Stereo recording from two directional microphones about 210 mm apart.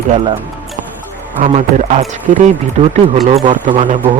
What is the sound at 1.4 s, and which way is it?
Speech, 35° right (ahead or behind).